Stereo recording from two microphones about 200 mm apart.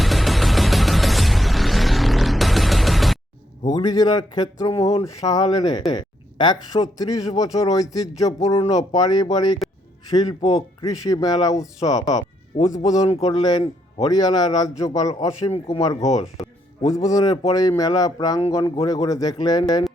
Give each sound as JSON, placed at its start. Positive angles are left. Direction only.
{"t": 0.0, "sound": "music", "side_deg": 0}
{"t": 3.8, "sound": "a man's voice", "side_deg": 20}
{"t": 12.1, "sound": "music", "side_deg": 20}
{"t": 12.8, "sound": "a man's voice", "side_deg": 20}
{"t": 15.4, "sound": "a man's voice", "side_deg": 30}
{"t": 16.4, "sound": "a man's voice", "side_deg": 0}
{"t": 17.0, "sound": "a man's voice", "side_deg": 15}